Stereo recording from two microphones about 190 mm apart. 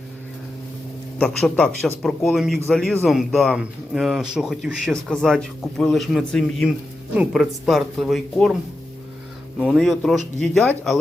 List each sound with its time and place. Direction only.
1.2 s a man's voice: 5° left (ahead or behind)
9.6 s a man's voice: centre (ahead or behind)